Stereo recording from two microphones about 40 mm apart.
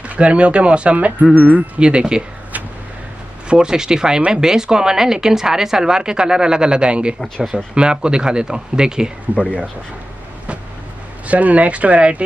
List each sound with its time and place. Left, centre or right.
0.0 s speech: right
1.2 s speech: right
1.8 s speech: right
3.4 s speech: centre
11.2 s speech: right